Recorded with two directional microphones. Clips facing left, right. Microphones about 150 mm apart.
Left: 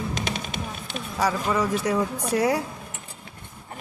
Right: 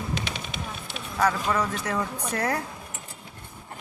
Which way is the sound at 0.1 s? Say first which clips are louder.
Left 2 dB; 45° left (ahead or behind).